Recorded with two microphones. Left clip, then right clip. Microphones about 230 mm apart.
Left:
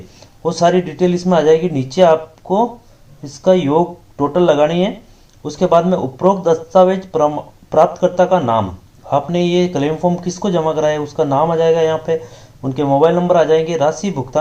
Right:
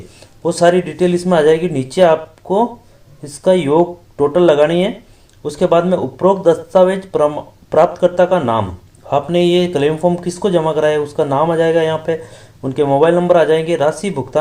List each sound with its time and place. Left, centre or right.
0.2 s speech: right